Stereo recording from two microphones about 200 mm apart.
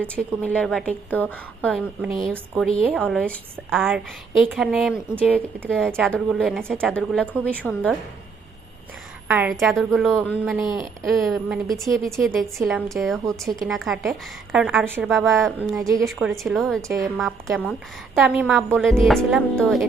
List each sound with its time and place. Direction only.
0.0 s a woman's voice: 5° left (ahead or behind); by 5.6 s 10° right (ahead or behind)
5.6 s a woman's voice: 5° left (ahead or behind)
9.2 s a woman's voice: 5° right (ahead or behind)
15.7 s a woman's voice: 15° right (ahead or behind)
16.0 s a woman's voice: centre (ahead or behind)